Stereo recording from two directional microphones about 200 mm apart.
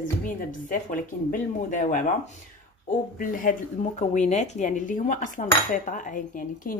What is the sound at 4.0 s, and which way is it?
Cutlery, 35° left (ahead or behind).